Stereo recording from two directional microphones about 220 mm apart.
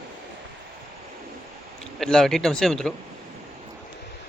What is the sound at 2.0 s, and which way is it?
Speech, centre (ahead or behind).